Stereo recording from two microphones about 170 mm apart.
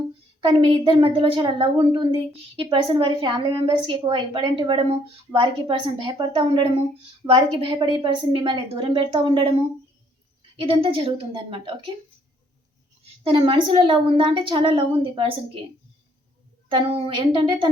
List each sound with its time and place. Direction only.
0.4 s a woman's voice: 25° right (ahead or behind)
10.7 s a woman's voice: 30° right (ahead or behind)
13.2 s a woman's voice: 30° right (ahead or behind)
16.6 s a woman's voice: 30° right (ahead or behind)